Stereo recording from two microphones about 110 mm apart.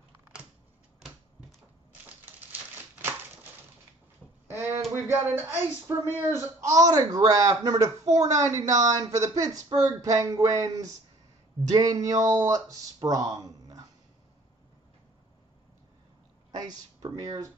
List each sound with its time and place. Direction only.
4.5 s a sound: 25° right (ahead or behind)
5.0 s speech: 20° right (ahead or behind)
16.5 s speech: 35° right (ahead or behind)